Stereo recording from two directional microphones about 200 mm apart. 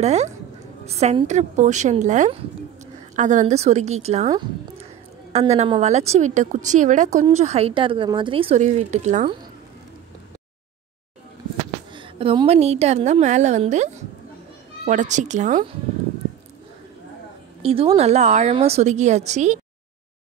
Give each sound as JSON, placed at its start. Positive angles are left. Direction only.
{"t": 0.0, "sound": "a woman's voice", "side_deg": -35}
{"t": 5.3, "sound": "a woman's voice", "side_deg": -30}
{"t": 11.9, "sound": "a woman's voice", "side_deg": -25}
{"t": 17.6, "sound": "a woman's voice", "side_deg": -30}